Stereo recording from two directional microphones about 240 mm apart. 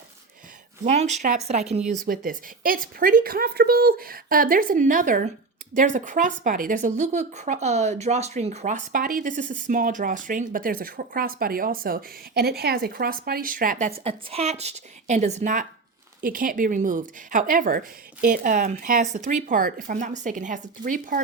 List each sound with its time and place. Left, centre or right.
0.9 s speech: right